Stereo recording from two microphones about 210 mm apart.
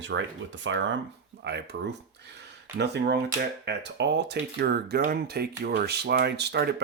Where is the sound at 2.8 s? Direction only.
50° right (ahead or behind).